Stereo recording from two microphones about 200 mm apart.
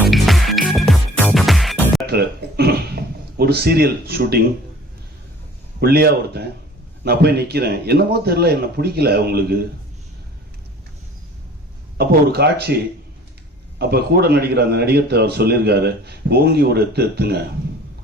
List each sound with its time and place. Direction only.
0.0 s music: centre (ahead or behind)
2.0 s a sound: 50° right (ahead or behind)
5.8 s a man's voice: 55° right (ahead or behind)
11.9 s a man's voice: 50° right (ahead or behind)